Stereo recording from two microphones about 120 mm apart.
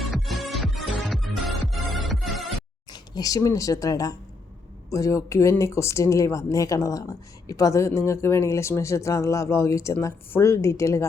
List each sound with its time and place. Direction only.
0.0 s music: centre (ahead or behind)
2.9 s speech: 30° left (ahead or behind)